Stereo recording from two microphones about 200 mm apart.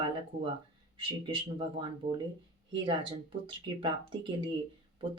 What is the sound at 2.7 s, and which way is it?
Speech, 25° right (ahead or behind).